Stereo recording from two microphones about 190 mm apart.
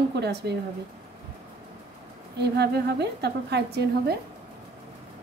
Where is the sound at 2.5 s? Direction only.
60° right (ahead or behind).